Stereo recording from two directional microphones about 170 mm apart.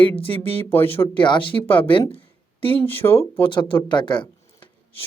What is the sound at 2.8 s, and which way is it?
Speech, 10° left (ahead or behind).